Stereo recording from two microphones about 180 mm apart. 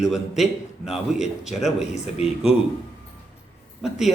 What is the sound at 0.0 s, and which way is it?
A man's voice, centre (ahead or behind).